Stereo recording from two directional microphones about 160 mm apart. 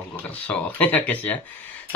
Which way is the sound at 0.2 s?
10° left (ahead or behind).